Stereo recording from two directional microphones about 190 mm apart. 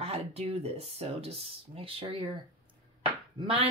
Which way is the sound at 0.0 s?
30° right (ahead or behind).